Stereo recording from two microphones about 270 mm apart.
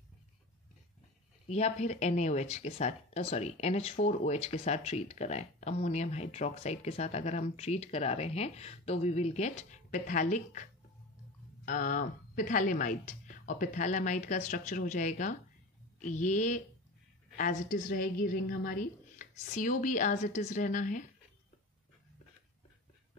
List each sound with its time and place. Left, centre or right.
1.5 s speech: left